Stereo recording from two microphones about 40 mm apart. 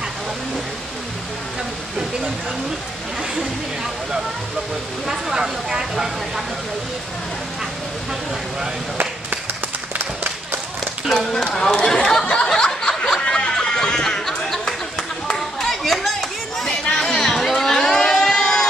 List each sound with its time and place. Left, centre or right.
3.2 s speech: centre
11.1 s speech: centre
12.4 s a sound: centre
12.9 s snicker: centre
13.2 s music: centre
15.3 s clapping: centre
16.9 s chatter: centre
17.7 s a sound: centre